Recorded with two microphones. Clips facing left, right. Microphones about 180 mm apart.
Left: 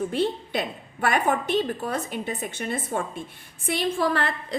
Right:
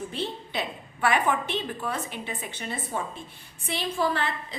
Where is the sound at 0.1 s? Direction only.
50° left (ahead or behind).